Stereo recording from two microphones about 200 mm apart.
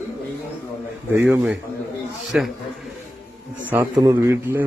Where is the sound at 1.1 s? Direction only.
10° right (ahead or behind).